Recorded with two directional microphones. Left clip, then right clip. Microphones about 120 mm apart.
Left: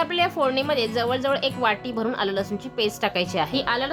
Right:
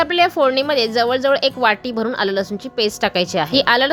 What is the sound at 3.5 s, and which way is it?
Speech, 70° right (ahead or behind).